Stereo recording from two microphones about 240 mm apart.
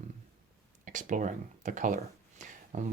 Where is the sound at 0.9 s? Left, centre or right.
Right.